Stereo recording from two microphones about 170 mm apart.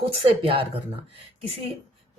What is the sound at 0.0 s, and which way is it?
Speech, 35° right (ahead or behind).